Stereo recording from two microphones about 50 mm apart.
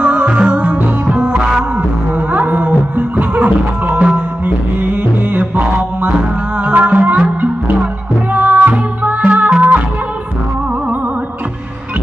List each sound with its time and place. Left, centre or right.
0.0 s music: right
2.3 s music: right
5.3 s mantra: right
6.6 s music: right
8.3 s music: right